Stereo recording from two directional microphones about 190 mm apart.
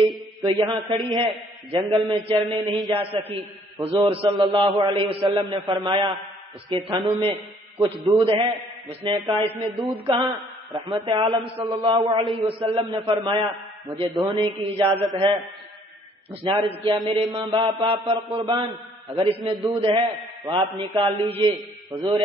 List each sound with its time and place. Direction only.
0.4 s a man's voice: 25° right (ahead or behind)
21.9 s speech: 20° right (ahead or behind)